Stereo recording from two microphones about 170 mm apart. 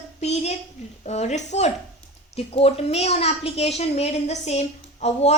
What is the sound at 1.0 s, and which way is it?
A woman's voice, 40° left (ahead or behind).